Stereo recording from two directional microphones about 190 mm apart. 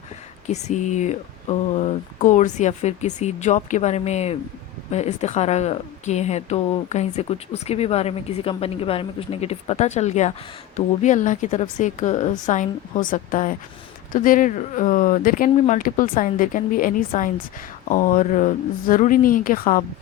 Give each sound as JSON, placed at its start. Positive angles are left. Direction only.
{"t": 0.4, "sound": "speech", "side_deg": 35}